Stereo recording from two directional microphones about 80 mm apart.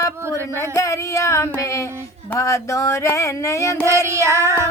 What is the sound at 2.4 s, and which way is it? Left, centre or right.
Music, left.